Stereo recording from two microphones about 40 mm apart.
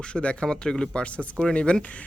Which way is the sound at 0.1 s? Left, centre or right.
Left.